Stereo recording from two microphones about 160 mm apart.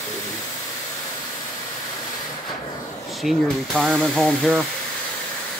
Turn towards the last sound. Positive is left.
turn(degrees=0)  # may be behind; listen again after turning